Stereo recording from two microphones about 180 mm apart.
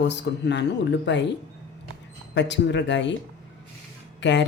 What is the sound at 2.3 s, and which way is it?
Speech, 75° left (ahead or behind).